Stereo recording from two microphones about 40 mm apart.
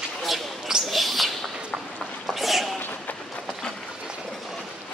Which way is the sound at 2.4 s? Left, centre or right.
Centre.